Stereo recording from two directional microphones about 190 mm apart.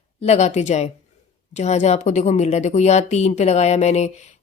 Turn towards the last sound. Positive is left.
turn(degrees=35)  # may be behind; listen again after turning